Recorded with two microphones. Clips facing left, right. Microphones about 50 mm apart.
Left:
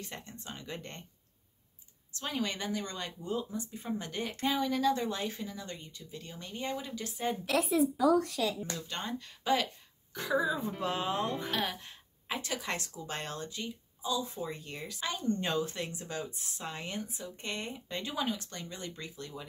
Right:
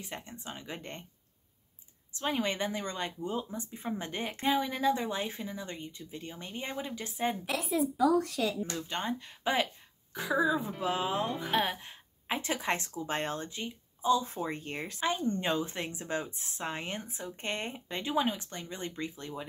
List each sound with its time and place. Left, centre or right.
0.0 s a woman's voice: centre
2.1 s a woman's voice: right
8.7 s a woman's voice: right
10.1 s speech: centre
11.5 s a woman's voice: right
12.4 s a woman's voice: right